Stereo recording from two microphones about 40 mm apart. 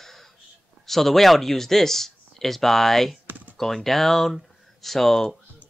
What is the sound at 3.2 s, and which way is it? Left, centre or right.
Typing, right.